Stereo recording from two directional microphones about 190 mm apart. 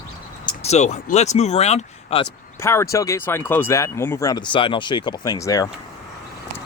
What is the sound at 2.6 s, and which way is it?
Speech, 15° left (ahead or behind).